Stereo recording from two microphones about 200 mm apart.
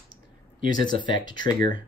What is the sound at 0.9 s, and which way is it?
Speech, 25° left (ahead or behind).